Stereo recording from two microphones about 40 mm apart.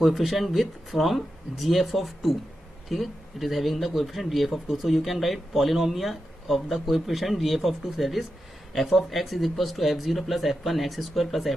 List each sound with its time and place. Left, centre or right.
0.0 s speech: centre